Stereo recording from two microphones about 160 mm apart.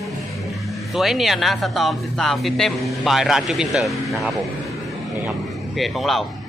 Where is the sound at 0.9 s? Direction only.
Centre (ahead or behind).